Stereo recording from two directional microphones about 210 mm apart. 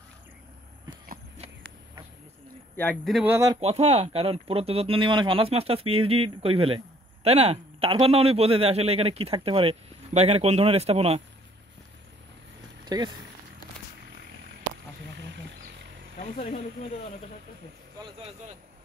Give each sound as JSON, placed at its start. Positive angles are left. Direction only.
{"t": 0.9, "sound": "a sound", "side_deg": -20}
{"t": 2.7, "sound": "speech", "side_deg": 5}
{"t": 3.3, "sound": "speech", "side_deg": -15}
{"t": 3.6, "sound": "speech", "side_deg": -30}
{"t": 12.8, "sound": "speech", "side_deg": -20}
{"t": 15.1, "sound": "wild animals", "side_deg": -55}